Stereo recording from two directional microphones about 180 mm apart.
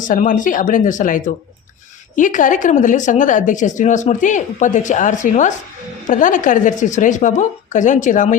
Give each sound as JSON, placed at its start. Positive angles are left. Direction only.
{"t": 0.0, "sound": "a woman's voice", "side_deg": 45}